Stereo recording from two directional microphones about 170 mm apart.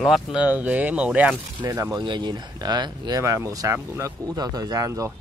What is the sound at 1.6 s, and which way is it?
Speech, 20° right (ahead or behind).